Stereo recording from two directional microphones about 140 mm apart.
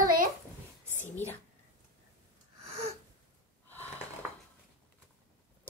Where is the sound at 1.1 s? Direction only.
15° left (ahead or behind).